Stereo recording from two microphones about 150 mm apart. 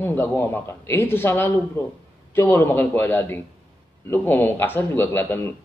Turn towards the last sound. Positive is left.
turn(degrees=15)  # may be behind; listen again after turning